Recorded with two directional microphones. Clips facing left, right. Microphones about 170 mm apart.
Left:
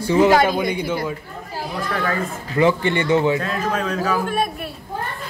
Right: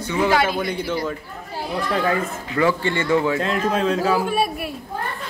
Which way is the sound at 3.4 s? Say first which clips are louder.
Right 3 dB; 30° right (ahead or behind).